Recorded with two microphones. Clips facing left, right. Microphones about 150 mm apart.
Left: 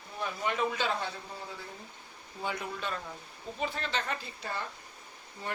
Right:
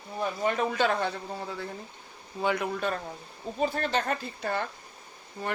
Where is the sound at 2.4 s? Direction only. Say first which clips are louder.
Right 8 dB; 70° right (ahead or behind).